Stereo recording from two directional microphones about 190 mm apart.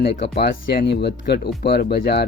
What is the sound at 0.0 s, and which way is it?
Speech, 60° left (ahead or behind).